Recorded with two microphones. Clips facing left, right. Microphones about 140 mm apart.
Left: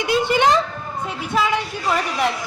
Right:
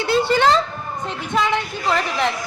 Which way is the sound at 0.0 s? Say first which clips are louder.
Right 1 dB; 15° left (ahead or behind).